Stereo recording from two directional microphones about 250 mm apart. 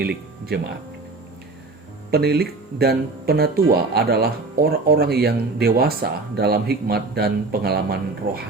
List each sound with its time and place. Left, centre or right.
0.0 s speech: right
2.0 s speech: right